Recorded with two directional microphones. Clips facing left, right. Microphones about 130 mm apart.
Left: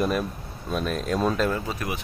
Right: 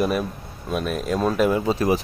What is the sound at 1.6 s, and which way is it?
Speech, 30° right (ahead or behind).